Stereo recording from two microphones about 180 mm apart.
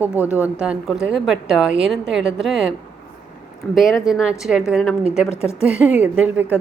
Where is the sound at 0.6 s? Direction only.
5° right (ahead or behind).